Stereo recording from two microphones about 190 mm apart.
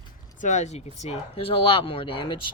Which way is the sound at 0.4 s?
40° left (ahead or behind).